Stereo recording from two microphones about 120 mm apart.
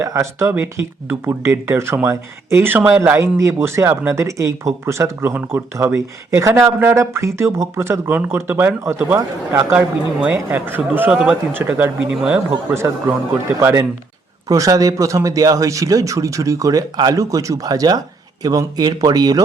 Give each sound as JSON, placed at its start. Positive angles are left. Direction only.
{"t": 0.0, "sound": "speech", "side_deg": -25}
{"t": 9.7, "sound": "speech", "side_deg": -15}